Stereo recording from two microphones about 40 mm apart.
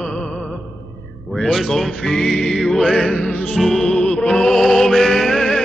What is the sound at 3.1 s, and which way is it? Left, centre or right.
Music, left.